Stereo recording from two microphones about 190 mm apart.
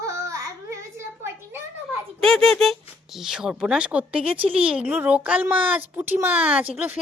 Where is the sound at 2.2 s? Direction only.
Centre (ahead or behind).